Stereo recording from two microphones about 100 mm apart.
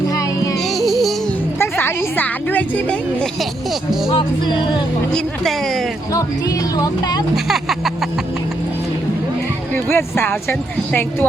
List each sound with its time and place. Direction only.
0.8 s music: centre (ahead or behind)
1.5 s a sound: 25° left (ahead or behind)
4.1 s music: 50° left (ahead or behind)
6.7 s speech: 40° left (ahead or behind)
7.4 s speech: 5° right (ahead or behind)
9.7 s speech: 20° left (ahead or behind)